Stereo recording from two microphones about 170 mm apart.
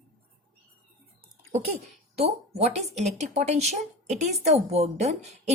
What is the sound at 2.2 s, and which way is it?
Speech, 40° right (ahead or behind).